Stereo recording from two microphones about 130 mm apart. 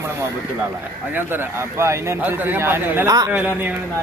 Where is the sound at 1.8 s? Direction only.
20° right (ahead or behind).